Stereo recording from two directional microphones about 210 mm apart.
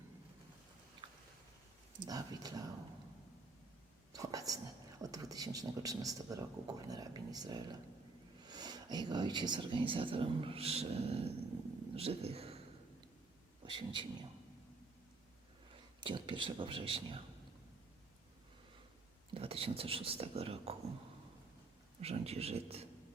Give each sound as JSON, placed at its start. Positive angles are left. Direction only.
{"t": 2.0, "sound": "a man's voice", "side_deg": -15}
{"t": 4.1, "sound": "whispering", "side_deg": -15}
{"t": 5.0, "sound": "a man's voice", "side_deg": -15}
{"t": 13.7, "sound": "speech", "side_deg": -25}
{"t": 16.0, "sound": "speech", "side_deg": -25}
{"t": 19.3, "sound": "speech", "side_deg": -25}
{"t": 22.0, "sound": "speech", "side_deg": -30}